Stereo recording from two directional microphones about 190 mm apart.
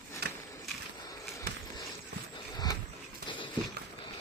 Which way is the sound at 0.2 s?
60° right (ahead or behind).